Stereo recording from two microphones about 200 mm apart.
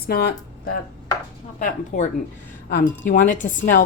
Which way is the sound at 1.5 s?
40° left (ahead or behind).